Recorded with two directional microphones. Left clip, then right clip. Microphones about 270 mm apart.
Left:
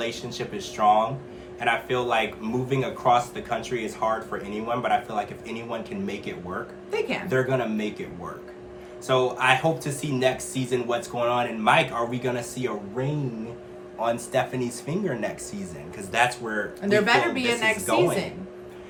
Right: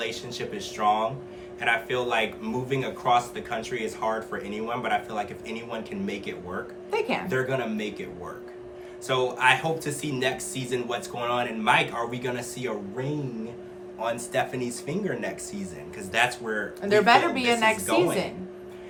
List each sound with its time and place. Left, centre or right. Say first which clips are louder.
0.0 s a man's voice: left 1 dB; centre
6.9 s a woman's voice: even; centre
7.3 s a man's voice: left 3 dB; centre
9.0 s a man's voice: left 1 dB; centre
14.0 s a man's voice: left 3 dB; centre
16.8 s a woman's voice: right 2 dB; centre